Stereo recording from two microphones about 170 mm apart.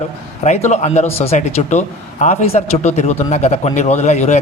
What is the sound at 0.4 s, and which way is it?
A man's voice, 40° left (ahead or behind).